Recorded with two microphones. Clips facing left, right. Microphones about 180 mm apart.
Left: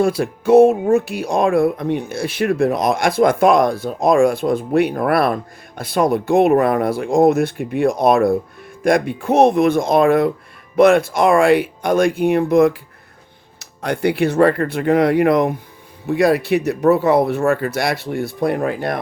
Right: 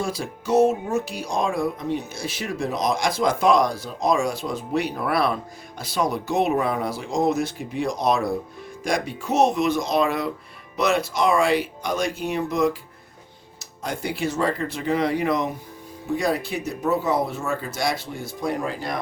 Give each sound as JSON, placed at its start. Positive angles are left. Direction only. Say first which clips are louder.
{"t": 0.0, "sound": "speech", "louder": "left 11 dB", "side_deg": 60}
{"t": 16.0, "sound": "speech", "louder": "left 9 dB", "side_deg": 70}